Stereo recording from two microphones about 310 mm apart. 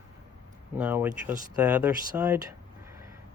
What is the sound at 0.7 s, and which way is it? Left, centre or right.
Speech, centre.